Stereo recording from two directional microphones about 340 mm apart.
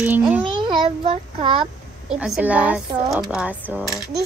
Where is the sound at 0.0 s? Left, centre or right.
Centre.